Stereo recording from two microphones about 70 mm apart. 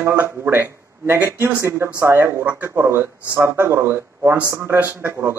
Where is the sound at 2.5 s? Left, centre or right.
Right.